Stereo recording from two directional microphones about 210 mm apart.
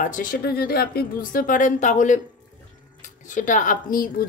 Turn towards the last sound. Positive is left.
turn(degrees=40)  # may be behind; listen again after turning